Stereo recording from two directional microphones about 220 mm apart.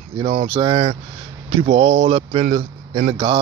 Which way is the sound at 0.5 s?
25° right (ahead or behind).